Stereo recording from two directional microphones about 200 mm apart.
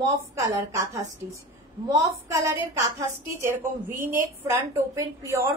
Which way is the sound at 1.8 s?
15° right (ahead or behind).